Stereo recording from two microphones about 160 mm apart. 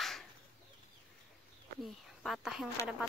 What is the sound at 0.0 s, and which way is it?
Chicken, centre (ahead or behind).